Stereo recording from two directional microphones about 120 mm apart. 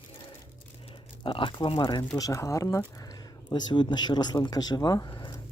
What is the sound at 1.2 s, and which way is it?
Speech, 45° left (ahead or behind).